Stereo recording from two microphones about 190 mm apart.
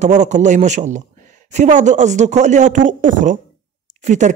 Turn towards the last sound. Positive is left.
turn(degrees=-40)  # may be behind; listen again after turning